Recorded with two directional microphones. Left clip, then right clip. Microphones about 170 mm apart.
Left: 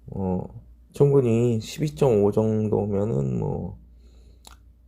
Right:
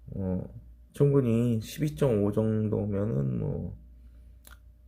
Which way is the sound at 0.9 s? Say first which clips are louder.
Left 6 dB; 15° left (ahead or behind).